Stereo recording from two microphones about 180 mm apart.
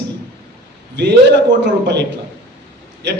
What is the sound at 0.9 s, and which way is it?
A man's voice, 75° right (ahead or behind).